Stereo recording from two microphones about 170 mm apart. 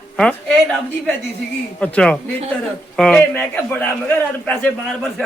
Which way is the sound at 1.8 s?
5° left (ahead or behind).